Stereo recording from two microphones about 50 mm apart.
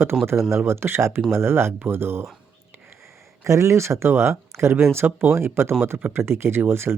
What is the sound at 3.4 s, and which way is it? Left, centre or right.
Speech, right.